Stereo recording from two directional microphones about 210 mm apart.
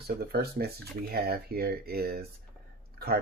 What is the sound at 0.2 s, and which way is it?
Speech, 45° right (ahead or behind).